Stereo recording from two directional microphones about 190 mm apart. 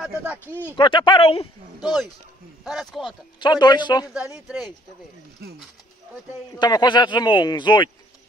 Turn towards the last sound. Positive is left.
turn(degrees=25)  # may be behind; listen again after turning